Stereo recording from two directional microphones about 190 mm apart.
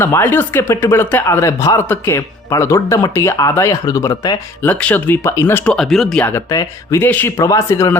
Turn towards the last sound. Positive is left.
turn(degrees=15)  # may be behind; listen again after turning